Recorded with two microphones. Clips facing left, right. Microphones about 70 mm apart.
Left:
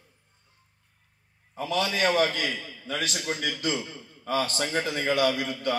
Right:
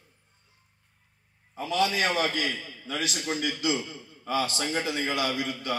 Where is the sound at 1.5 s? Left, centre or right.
Left.